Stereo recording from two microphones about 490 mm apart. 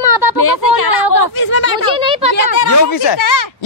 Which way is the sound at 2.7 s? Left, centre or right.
Left.